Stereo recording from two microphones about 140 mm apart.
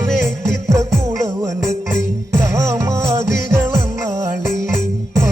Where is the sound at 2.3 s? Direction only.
20° right (ahead or behind).